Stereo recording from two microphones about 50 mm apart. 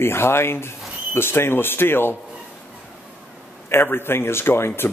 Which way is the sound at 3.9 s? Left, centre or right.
Left.